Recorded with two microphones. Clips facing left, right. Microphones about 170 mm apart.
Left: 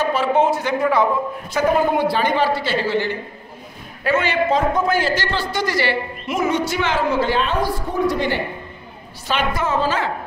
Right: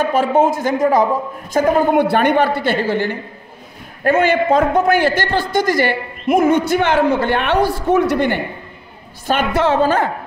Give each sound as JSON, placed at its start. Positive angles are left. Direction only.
{"t": 0.0, "sound": "a man's voice", "side_deg": -50}
{"t": 9.5, "sound": "a woman's voice", "side_deg": -80}
{"t": 9.8, "sound": "speech", "side_deg": -55}